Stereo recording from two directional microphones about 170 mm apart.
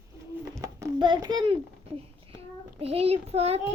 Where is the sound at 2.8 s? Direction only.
35° right (ahead or behind).